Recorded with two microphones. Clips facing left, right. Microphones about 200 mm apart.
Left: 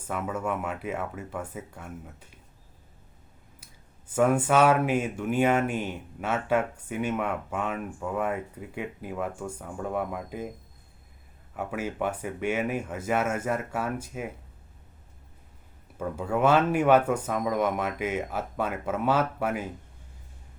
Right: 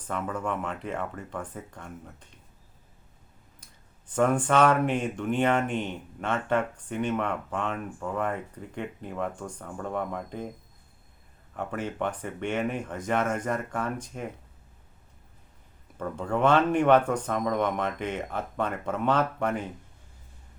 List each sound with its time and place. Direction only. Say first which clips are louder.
0.1 s speech: left 1 dB; 5° left (ahead or behind)
4.1 s speech: left 1 dB; 5° left (ahead or behind)
11.5 s speech: left 1 dB; 5° left (ahead or behind)
16.0 s speech: left 1 dB; 5° left (ahead or behind)